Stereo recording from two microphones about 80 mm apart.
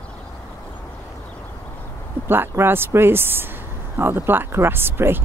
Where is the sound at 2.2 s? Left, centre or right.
Right.